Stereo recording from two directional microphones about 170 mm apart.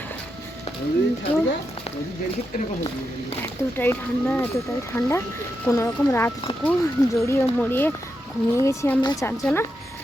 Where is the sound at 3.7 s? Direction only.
10° left (ahead or behind).